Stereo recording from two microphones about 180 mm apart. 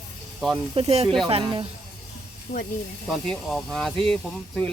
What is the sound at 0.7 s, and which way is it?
Speech, 30° right (ahead or behind).